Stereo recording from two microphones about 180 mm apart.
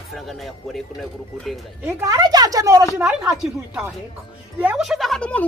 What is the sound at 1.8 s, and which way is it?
Speech, 20° right (ahead or behind).